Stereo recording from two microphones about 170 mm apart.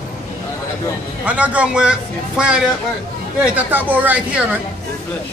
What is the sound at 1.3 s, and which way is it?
Speech, 10° right (ahead or behind).